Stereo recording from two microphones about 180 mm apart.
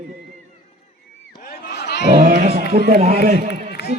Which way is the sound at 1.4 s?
65° left (ahead or behind).